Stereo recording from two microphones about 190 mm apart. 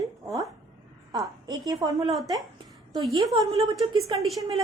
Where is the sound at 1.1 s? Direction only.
20° right (ahead or behind).